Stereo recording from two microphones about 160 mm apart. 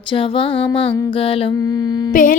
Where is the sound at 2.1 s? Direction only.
60° left (ahead or behind).